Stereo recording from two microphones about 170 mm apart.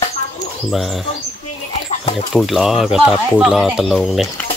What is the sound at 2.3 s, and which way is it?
Speech, centre (ahead or behind).